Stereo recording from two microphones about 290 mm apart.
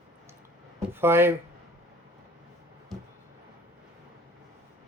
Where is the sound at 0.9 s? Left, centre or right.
Centre.